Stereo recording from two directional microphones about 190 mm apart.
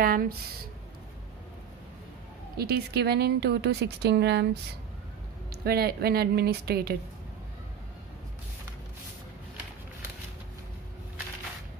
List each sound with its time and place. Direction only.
0.0 s speech: 50° right (ahead or behind)
2.5 s speech: 55° right (ahead or behind)
5.5 s speech: 55° right (ahead or behind)